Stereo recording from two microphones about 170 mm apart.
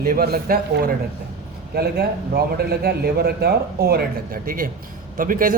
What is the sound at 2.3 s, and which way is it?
A man's voice, 65° right (ahead or behind).